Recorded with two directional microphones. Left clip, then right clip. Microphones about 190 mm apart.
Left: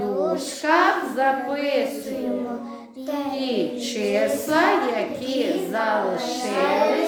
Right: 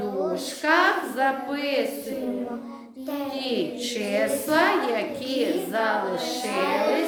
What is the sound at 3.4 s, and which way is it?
A woman's voice, 10° right (ahead or behind).